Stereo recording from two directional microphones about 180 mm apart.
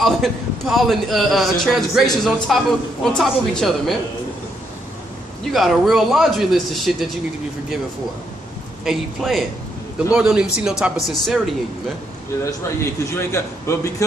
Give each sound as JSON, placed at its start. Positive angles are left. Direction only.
{"t": 0.0, "sound": "a man's voice", "side_deg": 0}
{"t": 5.5, "sound": "a man's voice", "side_deg": 0}
{"t": 8.8, "sound": "a man's voice", "side_deg": 0}
{"t": 12.5, "sound": "a man's voice", "side_deg": 15}